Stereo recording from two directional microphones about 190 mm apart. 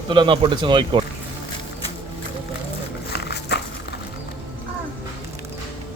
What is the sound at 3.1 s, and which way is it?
Dog, 60° left (ahead or behind).